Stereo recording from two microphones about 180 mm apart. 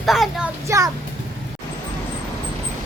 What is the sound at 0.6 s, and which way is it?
Speech, 15° right (ahead or behind).